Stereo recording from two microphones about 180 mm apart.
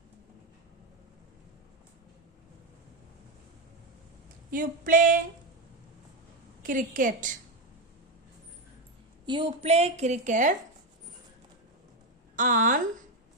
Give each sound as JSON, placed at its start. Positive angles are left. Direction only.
{"t": 4.5, "sound": "female singing", "side_deg": -50}
{"t": 6.6, "sound": "female singing", "side_deg": -45}
{"t": 9.2, "sound": "a woman's voice", "side_deg": -25}
{"t": 12.4, "sound": "female singing", "side_deg": -45}